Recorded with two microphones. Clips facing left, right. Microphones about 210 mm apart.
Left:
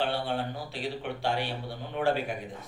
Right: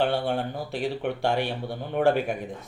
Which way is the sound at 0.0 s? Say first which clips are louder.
Right 5 dB; 45° right (ahead or behind).